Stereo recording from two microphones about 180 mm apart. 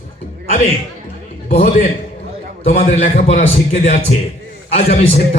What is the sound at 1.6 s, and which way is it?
Speech, 50° left (ahead or behind).